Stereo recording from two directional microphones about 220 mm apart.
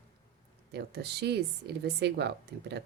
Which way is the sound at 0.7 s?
50° right (ahead or behind).